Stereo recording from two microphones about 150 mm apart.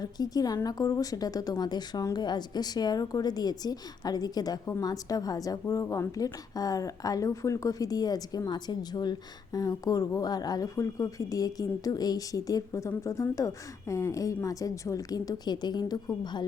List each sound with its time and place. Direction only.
0.0 s a woman's voice: 25° left (ahead or behind)